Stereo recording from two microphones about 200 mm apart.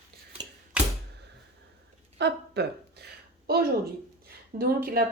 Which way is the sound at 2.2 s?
55° right (ahead or behind).